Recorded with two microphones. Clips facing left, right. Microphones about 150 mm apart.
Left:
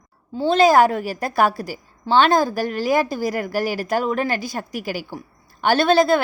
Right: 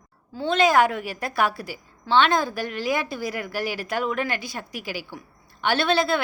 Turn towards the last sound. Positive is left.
turn(degrees=40)  # may be behind; listen again after turning